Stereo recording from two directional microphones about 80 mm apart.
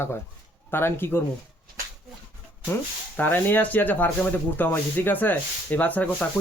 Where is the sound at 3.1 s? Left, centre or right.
Left.